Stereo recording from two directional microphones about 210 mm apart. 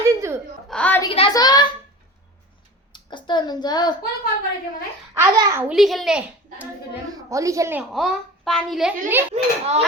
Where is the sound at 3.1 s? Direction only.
20° left (ahead or behind).